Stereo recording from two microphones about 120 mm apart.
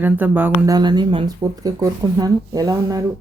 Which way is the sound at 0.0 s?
15° right (ahead or behind).